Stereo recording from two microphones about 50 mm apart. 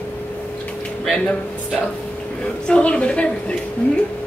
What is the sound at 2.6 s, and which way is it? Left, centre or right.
Speech, centre.